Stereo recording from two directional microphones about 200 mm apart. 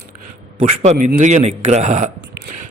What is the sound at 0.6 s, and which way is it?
A man's voice, 40° right (ahead or behind).